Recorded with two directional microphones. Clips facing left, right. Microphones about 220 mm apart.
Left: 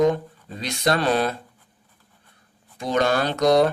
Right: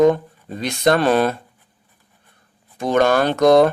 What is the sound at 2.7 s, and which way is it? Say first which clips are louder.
Speech: right 5 dB; 50° right (ahead or behind).